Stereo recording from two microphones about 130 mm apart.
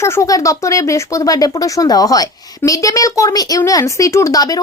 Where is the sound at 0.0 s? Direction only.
25° left (ahead or behind).